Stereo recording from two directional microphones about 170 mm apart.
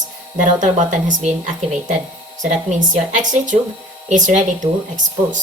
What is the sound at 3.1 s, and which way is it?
A woman's voice, 50° right (ahead or behind).